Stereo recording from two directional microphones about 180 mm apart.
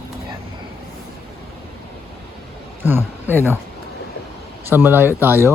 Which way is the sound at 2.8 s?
10° right (ahead or behind).